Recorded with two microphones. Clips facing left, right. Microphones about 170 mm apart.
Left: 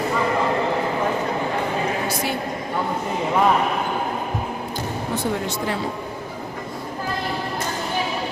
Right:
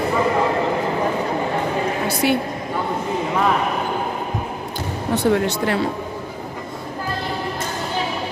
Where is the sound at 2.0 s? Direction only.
65° right (ahead or behind).